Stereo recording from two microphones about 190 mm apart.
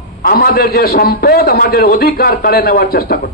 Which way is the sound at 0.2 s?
50° left (ahead or behind).